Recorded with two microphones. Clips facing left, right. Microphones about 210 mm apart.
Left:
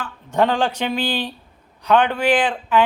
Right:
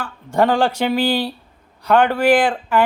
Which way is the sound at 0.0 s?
10° right (ahead or behind).